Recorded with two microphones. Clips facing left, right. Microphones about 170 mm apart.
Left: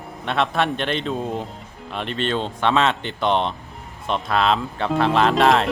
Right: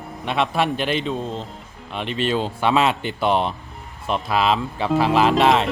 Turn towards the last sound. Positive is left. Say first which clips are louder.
# even
turn(degrees=0)  # may be behind; listen again after turning